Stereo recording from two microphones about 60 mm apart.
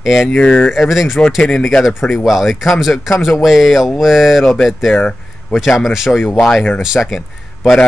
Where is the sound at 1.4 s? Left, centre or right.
Centre.